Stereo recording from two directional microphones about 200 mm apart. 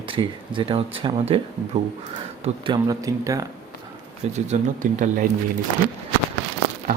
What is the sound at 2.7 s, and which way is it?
Speech, 15° right (ahead or behind).